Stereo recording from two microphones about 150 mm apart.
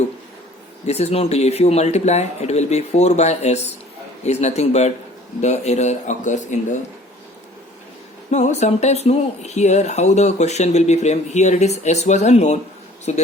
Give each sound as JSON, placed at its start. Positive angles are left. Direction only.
{"t": 0.9, "sound": "speech", "side_deg": 45}
{"t": 8.3, "sound": "speech", "side_deg": 50}